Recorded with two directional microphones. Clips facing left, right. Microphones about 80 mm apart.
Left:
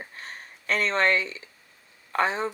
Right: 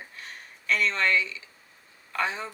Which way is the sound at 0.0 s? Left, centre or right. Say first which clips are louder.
Left 3 dB; left.